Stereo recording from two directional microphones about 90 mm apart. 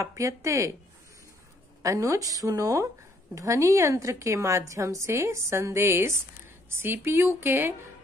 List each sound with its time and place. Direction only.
0.0 s a woman's voice: 35° right (ahead or behind)
1.8 s a woman's voice: 40° right (ahead or behind)